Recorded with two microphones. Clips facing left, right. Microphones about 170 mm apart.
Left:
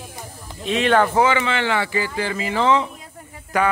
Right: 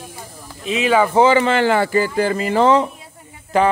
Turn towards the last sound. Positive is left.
turn(degrees=-25)  # may be behind; listen again after turning